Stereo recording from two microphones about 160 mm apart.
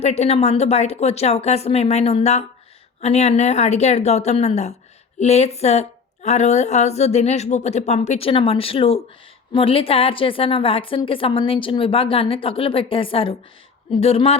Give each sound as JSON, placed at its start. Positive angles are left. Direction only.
{"t": 0.0, "sound": "a woman's voice", "side_deg": 40}